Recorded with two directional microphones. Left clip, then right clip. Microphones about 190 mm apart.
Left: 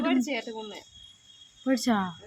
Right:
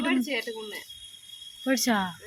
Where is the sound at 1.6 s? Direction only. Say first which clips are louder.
Right 1 dB; 10° left (ahead or behind).